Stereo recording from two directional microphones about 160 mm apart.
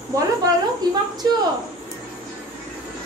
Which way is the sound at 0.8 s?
25° right (ahead or behind).